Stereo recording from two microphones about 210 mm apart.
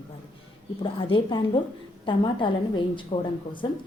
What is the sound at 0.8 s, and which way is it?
A woman's voice, 25° left (ahead or behind).